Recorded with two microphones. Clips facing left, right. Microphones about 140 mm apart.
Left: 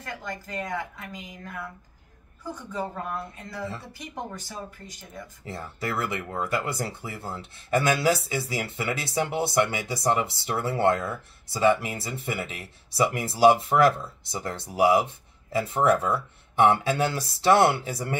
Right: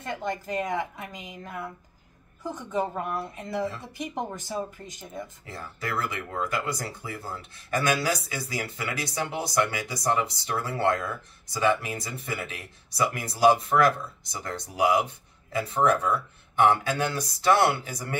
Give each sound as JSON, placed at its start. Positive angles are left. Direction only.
{"t": 0.0, "sound": "a woman's voice", "side_deg": -25}
{"t": 5.4, "sound": "speech", "side_deg": 25}